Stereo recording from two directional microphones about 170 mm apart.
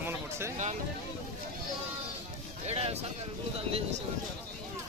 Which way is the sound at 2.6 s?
35° right (ahead or behind).